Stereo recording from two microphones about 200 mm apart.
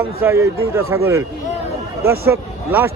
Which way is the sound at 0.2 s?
10° right (ahead or behind).